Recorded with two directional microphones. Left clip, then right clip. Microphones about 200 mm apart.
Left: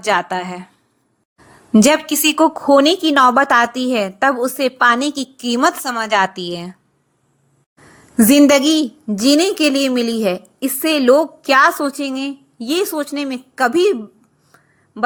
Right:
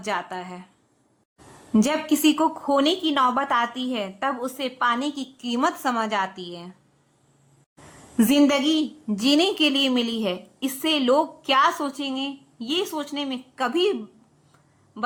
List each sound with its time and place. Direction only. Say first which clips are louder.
0.0 s a woman's voice: left 11 dB; 35° left (ahead or behind)
1.7 s a woman's voice: left 9 dB; 30° left (ahead or behind)
8.1 s a woman's voice: left 9 dB; 30° left (ahead or behind)